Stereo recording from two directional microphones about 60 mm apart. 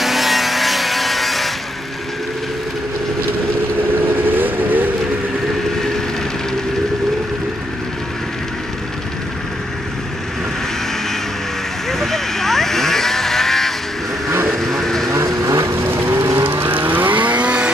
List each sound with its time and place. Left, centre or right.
0.0 s vehicle: centre
4.1 s vehicle: right
11.9 s vehicle: centre
15.0 s vehicle: right